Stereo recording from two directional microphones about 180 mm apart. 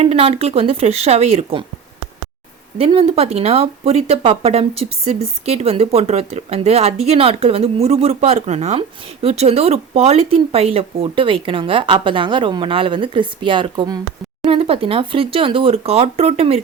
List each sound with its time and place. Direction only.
0.0 s speech: 30° right (ahead or behind)
2.7 s speech: 30° right (ahead or behind)